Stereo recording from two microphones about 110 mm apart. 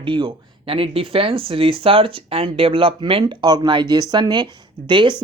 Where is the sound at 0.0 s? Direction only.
50° right (ahead or behind).